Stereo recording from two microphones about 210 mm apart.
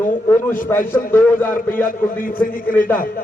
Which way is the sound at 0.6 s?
10° left (ahead or behind).